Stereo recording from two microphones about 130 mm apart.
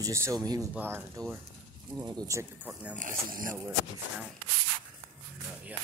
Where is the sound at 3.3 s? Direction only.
90° right.